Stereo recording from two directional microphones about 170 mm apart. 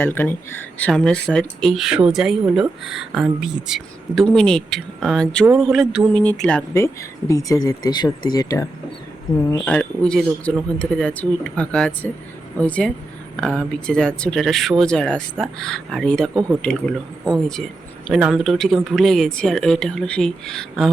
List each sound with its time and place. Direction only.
0.0 s speech: 10° left (ahead or behind)
6.7 s speech: 15° left (ahead or behind)
9.6 s speech: 5° left (ahead or behind)